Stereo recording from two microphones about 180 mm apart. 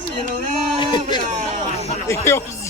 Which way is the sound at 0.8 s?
25° left (ahead or behind).